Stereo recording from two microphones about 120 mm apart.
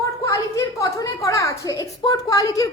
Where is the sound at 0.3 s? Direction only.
25° left (ahead or behind).